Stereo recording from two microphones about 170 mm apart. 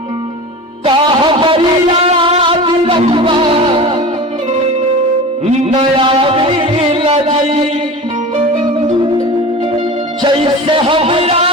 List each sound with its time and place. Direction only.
0.9 s a sound: 30° right (ahead or behind)
6.0 s music: 30° right (ahead or behind)
10.2 s music: 30° right (ahead or behind)